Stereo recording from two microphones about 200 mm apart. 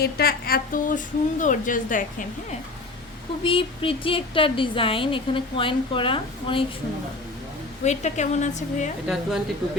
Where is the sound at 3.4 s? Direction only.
25° left (ahead or behind).